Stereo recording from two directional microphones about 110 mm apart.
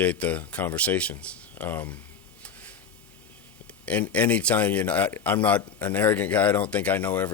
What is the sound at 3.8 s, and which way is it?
Speech, 10° left (ahead or behind).